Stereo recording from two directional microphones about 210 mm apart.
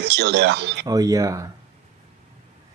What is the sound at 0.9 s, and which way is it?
Speech, 15° right (ahead or behind).